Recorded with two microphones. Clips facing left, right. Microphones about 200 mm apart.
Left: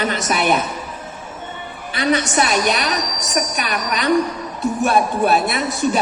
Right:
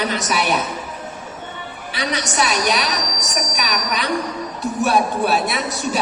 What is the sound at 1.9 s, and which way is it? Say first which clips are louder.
A man's voice: left 6 dB; 50° left (ahead or behind).